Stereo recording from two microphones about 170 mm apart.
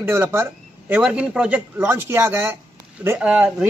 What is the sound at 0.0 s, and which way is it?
A man's voice, 15° right (ahead or behind).